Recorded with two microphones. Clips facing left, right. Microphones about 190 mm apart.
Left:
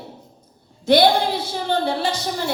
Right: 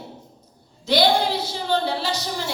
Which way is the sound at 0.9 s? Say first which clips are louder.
Left 3 dB; 55° left (ahead or behind).